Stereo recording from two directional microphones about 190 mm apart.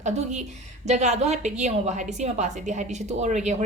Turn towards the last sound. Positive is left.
turn(degrees=-40)  # may be behind; listen again after turning